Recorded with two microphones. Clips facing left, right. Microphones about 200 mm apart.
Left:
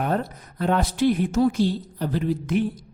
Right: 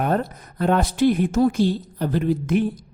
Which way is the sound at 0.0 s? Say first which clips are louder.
Right 3 dB; 50° right (ahead or behind).